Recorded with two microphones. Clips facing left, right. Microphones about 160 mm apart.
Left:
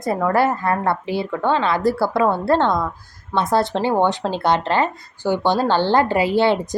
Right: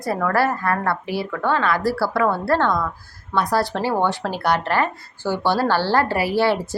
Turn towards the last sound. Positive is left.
turn(degrees=20)  # may be behind; listen again after turning